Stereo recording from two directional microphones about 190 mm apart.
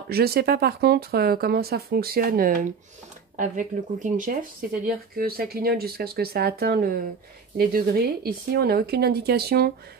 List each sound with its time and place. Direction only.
0.1 s speech: 55° right (ahead or behind)